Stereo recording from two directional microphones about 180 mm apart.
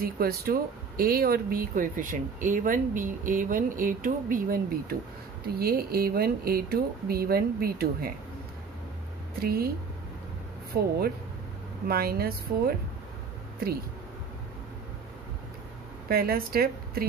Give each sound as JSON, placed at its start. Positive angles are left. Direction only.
{"t": 0.0, "sound": "speech", "side_deg": -55}
{"t": 9.4, "sound": "speech", "side_deg": -60}
{"t": 11.9, "sound": "speech", "side_deg": -60}
{"t": 16.1, "sound": "speech", "side_deg": -55}